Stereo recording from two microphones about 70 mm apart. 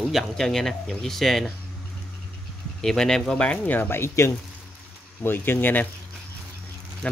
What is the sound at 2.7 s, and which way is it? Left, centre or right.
Speech, centre.